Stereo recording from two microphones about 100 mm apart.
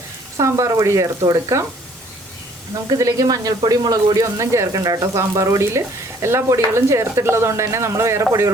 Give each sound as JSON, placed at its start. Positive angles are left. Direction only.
{"t": 0.3, "sound": "speech", "side_deg": -30}
{"t": 2.8, "sound": "speech", "side_deg": -35}